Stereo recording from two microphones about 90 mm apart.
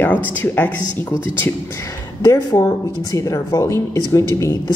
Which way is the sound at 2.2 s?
45° left (ahead or behind).